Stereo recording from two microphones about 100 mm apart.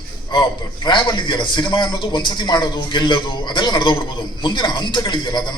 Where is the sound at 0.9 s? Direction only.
50° left (ahead or behind).